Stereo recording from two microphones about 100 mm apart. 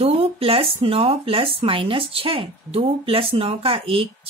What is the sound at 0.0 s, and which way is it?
A woman's voice, 80° right.